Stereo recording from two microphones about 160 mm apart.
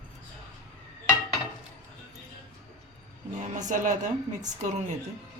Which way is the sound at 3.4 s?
50° right (ahead or behind).